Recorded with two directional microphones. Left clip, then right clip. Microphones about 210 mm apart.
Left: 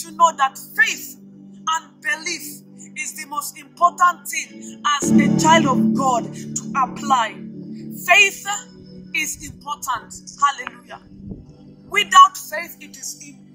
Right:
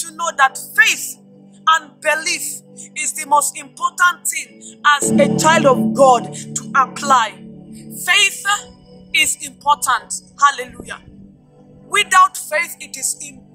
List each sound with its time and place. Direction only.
0.0 s music: 55° right (ahead or behind)